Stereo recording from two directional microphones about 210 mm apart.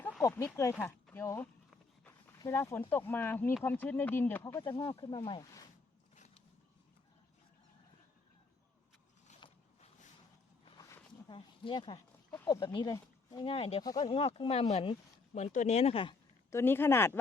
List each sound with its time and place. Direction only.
0.2 s speech: 15° left (ahead or behind)
4.9 s speech: 25° left (ahead or behind)
6.1 s a sound: 30° left (ahead or behind)
10.7 s a sound: 15° left (ahead or behind)
11.3 s speech: 25° left (ahead or behind)
16.5 s speech: 10° left (ahead or behind)